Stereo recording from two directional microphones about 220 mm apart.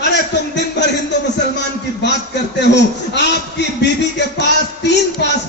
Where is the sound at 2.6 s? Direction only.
50° left (ahead or behind).